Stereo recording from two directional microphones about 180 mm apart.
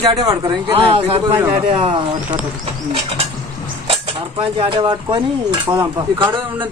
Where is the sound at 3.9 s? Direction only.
30° right (ahead or behind).